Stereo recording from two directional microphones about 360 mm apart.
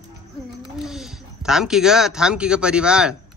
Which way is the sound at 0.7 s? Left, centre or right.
Centre.